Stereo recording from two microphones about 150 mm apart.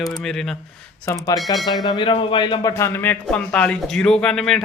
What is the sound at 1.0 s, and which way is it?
A man's voice, 25° left (ahead or behind).